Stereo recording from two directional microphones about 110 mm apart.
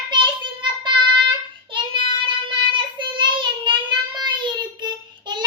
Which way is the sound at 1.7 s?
45° right (ahead or behind).